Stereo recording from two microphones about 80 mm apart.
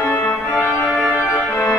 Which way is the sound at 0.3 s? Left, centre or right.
Left.